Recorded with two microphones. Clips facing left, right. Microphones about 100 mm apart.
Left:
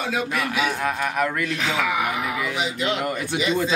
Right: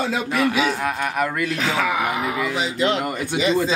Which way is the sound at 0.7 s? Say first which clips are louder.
Right 1 dB; centre (ahead or behind).